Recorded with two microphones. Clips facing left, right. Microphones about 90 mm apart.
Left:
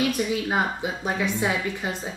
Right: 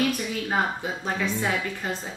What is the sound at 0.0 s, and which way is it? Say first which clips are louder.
A woman's voice: left 2 dB; 15° left (ahead or behind).